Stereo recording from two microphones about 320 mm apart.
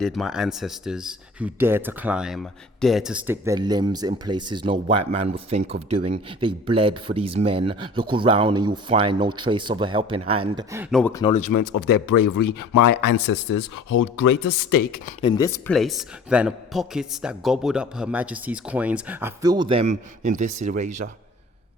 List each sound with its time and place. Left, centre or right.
0.0 s speech: centre
11.9 s speech: left
14.4 s speech: left
14.9 s speech: centre; by 21.1 s right